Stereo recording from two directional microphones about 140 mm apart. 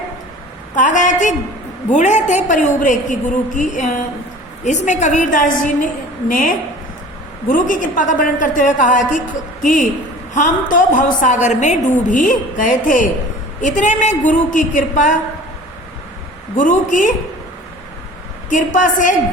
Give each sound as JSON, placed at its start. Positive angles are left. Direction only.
{"t": 0.8, "sound": "a woman's voice", "side_deg": 65}
{"t": 16.6, "sound": "a woman's voice", "side_deg": 70}
{"t": 18.5, "sound": "a woman's voice", "side_deg": 70}